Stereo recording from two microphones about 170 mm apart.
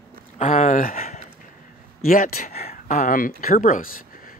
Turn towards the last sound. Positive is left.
turn(degrees=50)  # may be behind; listen again after turning